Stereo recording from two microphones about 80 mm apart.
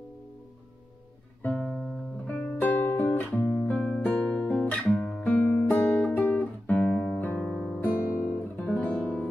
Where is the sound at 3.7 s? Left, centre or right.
Centre.